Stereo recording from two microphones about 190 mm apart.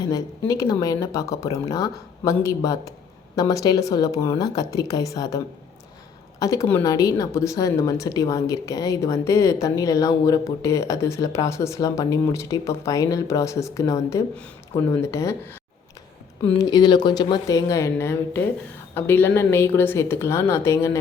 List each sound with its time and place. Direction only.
0.0 s a woman's voice: 20° left (ahead or behind)
6.4 s a woman's voice: 15° left (ahead or behind)